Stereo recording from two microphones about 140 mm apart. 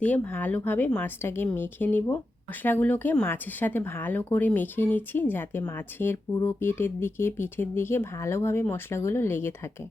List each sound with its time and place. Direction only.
0.0 s speech: 15° left (ahead or behind)